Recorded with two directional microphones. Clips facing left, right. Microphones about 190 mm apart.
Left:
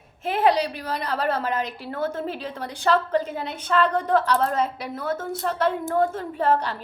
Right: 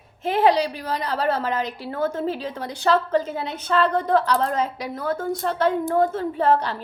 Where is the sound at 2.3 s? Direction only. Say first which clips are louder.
Right 4 dB; 35° right (ahead or behind).